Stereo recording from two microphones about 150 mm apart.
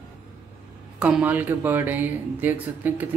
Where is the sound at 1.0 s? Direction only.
10° right (ahead or behind).